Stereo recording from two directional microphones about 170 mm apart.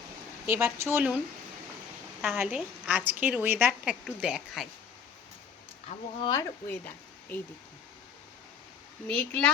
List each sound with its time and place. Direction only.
0.4 s a woman's voice: 15° right (ahead or behind)
2.2 s a woman's voice: 10° right (ahead or behind)
5.9 s speech: 30° left (ahead or behind)
6.7 s speech: 10° left (ahead or behind)
9.0 s speech: 5° left (ahead or behind)